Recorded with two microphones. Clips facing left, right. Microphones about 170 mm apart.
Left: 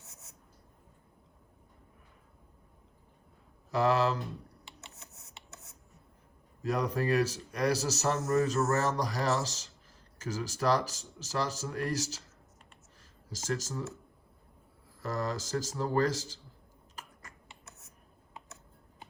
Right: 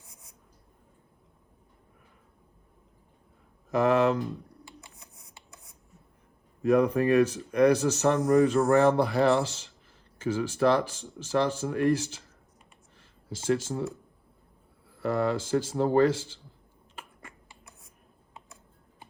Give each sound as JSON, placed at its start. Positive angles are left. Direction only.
{"t": 3.7, "sound": "speech", "side_deg": 35}
{"t": 4.6, "sound": "a sound", "side_deg": 25}
{"t": 6.6, "sound": "speech", "side_deg": 35}
{"t": 8.2, "sound": "speech", "side_deg": -30}
{"t": 9.0, "sound": "speech", "side_deg": 40}
{"t": 13.0, "sound": "a sound", "side_deg": 40}
{"t": 14.8, "sound": "speech", "side_deg": 40}
{"t": 16.9, "sound": "finger snapping", "side_deg": 40}